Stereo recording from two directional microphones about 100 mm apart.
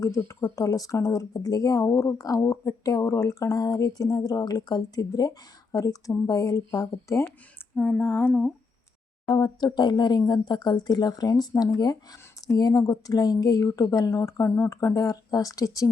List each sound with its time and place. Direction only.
0.2 s speech: 30° left (ahead or behind)
7.8 s humming: 20° left (ahead or behind)
9.2 s speech: 45° left (ahead or behind)